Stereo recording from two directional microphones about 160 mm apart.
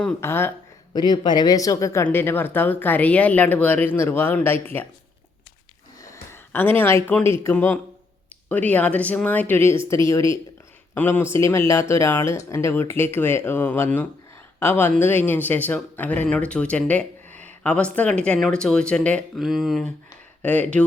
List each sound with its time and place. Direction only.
0.0 s speech: 15° left (ahead or behind)
0.9 s speech: 25° left (ahead or behind)
6.0 s a sound: 15° left (ahead or behind)
6.7 s speech: 15° left (ahead or behind)